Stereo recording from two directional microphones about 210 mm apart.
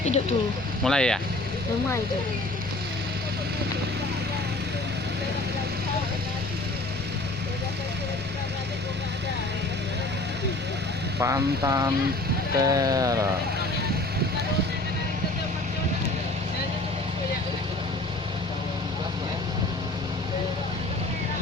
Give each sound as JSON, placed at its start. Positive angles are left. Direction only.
{"t": 0.0, "sound": "speech", "side_deg": 30}
{"t": 0.9, "sound": "speech", "side_deg": 5}
{"t": 11.2, "sound": "speech", "side_deg": -15}